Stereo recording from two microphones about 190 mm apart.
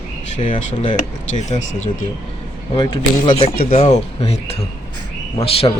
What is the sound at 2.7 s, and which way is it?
A man's voice, 25° left (ahead or behind).